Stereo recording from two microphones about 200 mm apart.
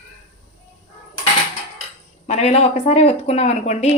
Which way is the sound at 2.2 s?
30° left (ahead or behind).